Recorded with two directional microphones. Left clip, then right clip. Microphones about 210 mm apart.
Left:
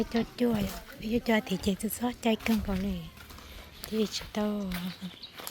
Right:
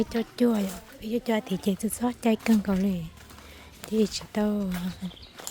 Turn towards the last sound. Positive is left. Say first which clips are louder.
# right 4 dB
turn(degrees=-25)  # may be behind; listen again after turning